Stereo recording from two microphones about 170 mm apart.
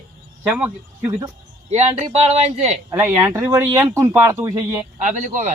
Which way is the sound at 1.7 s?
40° right (ahead or behind).